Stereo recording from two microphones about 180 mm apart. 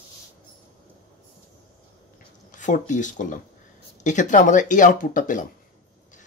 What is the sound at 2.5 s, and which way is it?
Speech, 45° left (ahead or behind).